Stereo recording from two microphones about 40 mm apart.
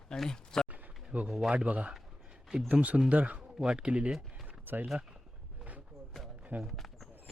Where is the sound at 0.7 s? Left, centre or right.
Right.